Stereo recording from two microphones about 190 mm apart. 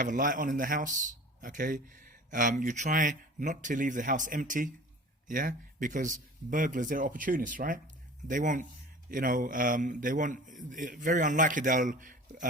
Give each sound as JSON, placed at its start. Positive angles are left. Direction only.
{"t": 0.0, "sound": "a man's voice", "side_deg": -45}